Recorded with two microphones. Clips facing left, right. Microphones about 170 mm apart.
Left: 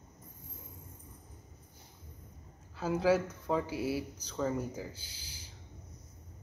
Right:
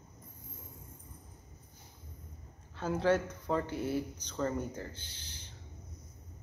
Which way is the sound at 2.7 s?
5° left (ahead or behind).